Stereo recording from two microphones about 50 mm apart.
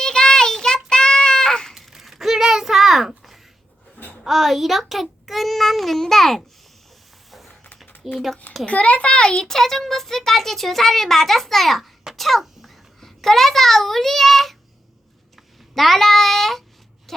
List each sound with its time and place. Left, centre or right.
0.0 s child singing: centre
1.7 s a sound: centre
4.2 s a child's voice: centre
8.0 s a child's voice: centre
8.6 s a child's voice: left
9.3 s a child's voice: centre
15.7 s a child's voice: centre
17.1 s a sound: centre